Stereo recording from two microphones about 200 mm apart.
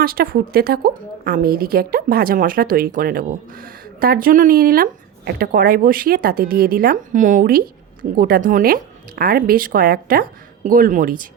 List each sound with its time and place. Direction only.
0.0 s a woman's voice: 50° right (ahead or behind)